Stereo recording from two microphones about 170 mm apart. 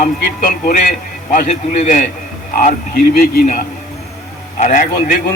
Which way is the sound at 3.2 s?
55° left (ahead or behind).